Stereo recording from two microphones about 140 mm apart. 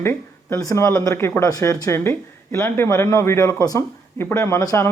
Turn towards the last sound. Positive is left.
turn(degrees=20)  # may be behind; listen again after turning